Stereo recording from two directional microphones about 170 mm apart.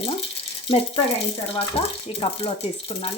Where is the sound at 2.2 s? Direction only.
35° left (ahead or behind).